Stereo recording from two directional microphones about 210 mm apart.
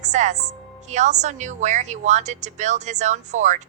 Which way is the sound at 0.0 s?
35° right (ahead or behind).